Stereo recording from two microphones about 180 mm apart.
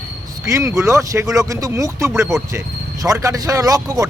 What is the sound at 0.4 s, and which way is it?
Speech, 15° right (ahead or behind).